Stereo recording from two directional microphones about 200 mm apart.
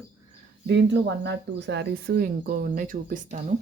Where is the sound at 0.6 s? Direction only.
60° right (ahead or behind); by 3.5 s 40° right (ahead or behind).